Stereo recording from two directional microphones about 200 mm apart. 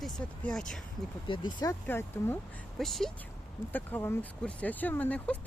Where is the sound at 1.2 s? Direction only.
25° left (ahead or behind).